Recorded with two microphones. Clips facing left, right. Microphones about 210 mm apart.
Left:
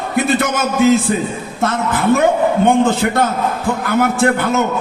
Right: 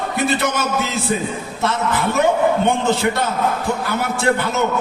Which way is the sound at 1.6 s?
50° left (ahead or behind).